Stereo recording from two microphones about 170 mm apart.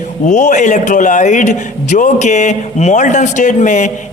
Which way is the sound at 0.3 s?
45° left (ahead or behind).